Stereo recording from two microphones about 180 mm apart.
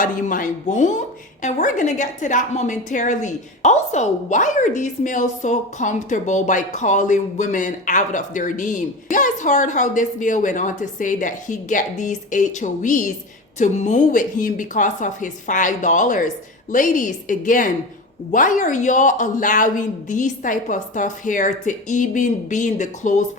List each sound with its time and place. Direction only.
0.0 s speech: 45° left (ahead or behind)